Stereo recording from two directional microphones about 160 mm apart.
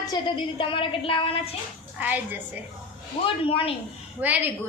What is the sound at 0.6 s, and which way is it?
Speech, 35° left (ahead or behind).